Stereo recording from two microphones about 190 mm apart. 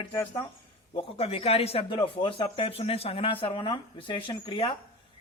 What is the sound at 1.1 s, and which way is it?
Speech, 30° left (ahead or behind).